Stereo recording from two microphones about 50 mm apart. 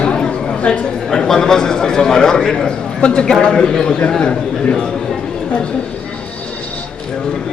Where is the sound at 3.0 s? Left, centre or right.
Left.